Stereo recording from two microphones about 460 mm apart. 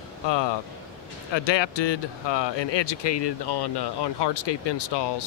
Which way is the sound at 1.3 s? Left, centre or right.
Left.